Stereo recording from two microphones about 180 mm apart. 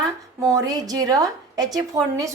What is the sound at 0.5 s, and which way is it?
A woman's voice, 20° right (ahead or behind).